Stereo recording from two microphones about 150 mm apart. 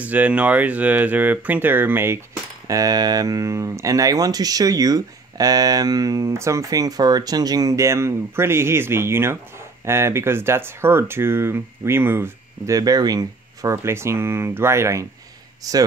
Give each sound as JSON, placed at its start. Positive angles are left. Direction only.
{"t": 0.0, "sound": "speech", "side_deg": -10}